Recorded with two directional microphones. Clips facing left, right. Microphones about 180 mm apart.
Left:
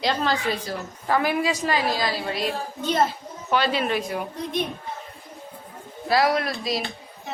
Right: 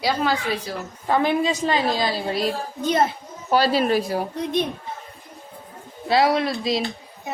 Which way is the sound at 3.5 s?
40° right (ahead or behind).